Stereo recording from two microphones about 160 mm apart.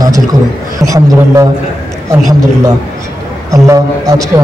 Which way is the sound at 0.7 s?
20° right (ahead or behind).